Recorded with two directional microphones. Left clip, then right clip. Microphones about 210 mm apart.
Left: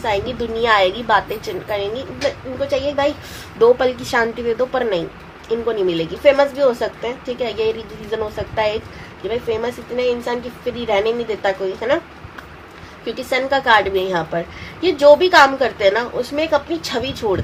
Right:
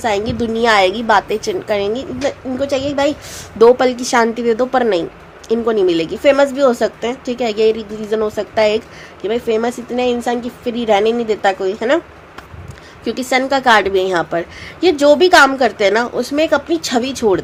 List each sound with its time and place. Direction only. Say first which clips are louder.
0.0 s a woman's voice: right 3 dB; 50° right (ahead or behind)
13.1 s a woman's voice: right 3 dB; 50° right (ahead or behind)